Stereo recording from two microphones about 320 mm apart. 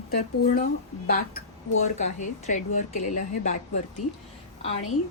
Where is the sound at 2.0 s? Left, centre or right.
Left.